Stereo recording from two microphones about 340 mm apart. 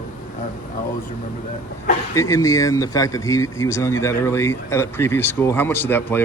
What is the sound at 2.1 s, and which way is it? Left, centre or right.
Speech, centre.